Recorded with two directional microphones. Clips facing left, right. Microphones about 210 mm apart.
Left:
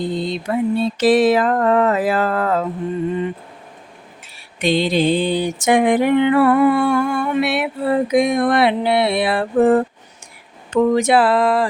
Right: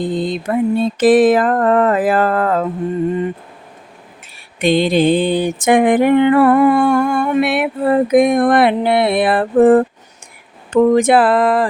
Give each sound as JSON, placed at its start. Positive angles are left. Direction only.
{"t": 0.0, "sound": "mantra", "side_deg": -50}
{"t": 4.6, "sound": "mantra", "side_deg": -55}